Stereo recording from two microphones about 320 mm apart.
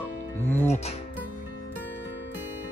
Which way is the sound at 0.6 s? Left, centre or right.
Left.